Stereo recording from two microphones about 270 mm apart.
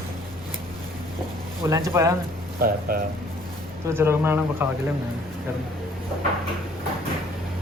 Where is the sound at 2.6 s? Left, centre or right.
Right.